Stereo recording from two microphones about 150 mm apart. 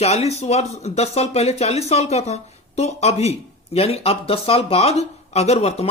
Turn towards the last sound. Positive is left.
turn(degrees=45)  # may be behind; listen again after turning